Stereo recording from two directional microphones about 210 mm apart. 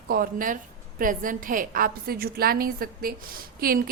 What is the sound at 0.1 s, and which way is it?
A woman's voice, 40° right (ahead or behind).